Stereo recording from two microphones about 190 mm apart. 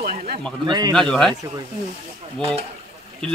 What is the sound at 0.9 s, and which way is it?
Speech, 5° left (ahead or behind).